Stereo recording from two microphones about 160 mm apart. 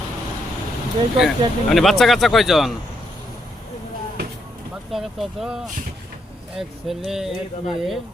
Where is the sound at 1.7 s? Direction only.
Centre (ahead or behind).